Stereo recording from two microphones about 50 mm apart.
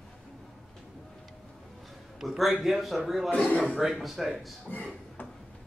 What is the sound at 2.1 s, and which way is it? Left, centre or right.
A man's voice, centre.